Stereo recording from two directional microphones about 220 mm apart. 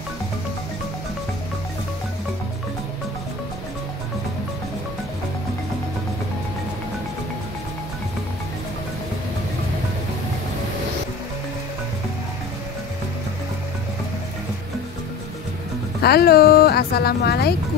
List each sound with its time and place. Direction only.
16.0 s speech: 45° left (ahead or behind)